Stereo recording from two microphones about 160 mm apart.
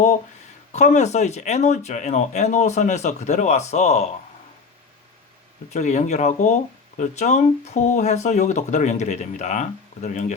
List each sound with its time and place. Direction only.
0.7 s speech: 45° left (ahead or behind)
5.7 s speech: 45° left (ahead or behind)